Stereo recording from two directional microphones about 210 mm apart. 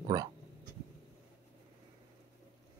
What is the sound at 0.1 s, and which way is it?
Speech, 15° right (ahead or behind).